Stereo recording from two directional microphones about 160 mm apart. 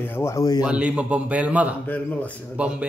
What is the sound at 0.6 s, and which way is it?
Speech, 5° right (ahead or behind).